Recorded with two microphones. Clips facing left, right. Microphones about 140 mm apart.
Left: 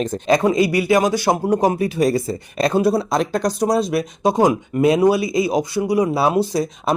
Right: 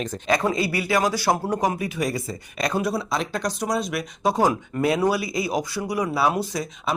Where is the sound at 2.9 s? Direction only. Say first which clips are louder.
Left 7 dB; 40° left (ahead or behind).